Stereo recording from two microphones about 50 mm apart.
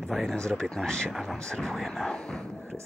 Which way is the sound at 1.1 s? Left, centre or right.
Centre.